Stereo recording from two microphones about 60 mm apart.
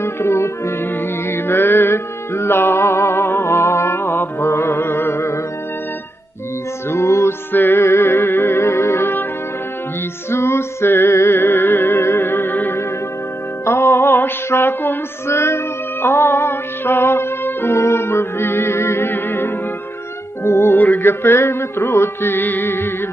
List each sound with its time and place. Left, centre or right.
0.0 s music: left
6.9 s music: left
7.5 s music: left
10.3 s music: left